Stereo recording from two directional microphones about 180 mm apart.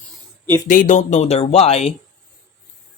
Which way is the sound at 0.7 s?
45° left (ahead or behind).